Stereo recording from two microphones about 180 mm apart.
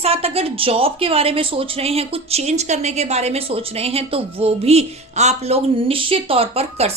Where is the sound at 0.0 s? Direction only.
35° right (ahead or behind).